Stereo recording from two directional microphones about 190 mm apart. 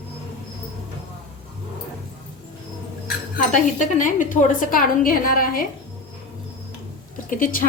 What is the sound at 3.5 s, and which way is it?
A woman's voice, 40° left (ahead or behind).